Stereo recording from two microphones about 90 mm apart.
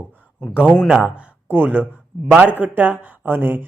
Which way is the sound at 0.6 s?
15° left (ahead or behind).